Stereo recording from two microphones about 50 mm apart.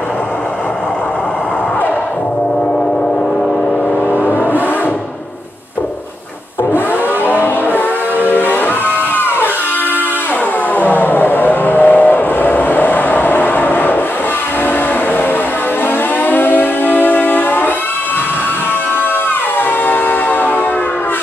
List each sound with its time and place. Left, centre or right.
7.2 s music: left
10.8 s vehicle: left
16.3 s music: left
19.9 s train: left